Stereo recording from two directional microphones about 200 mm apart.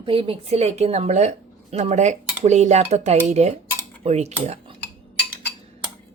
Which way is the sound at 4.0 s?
30° right (ahead or behind).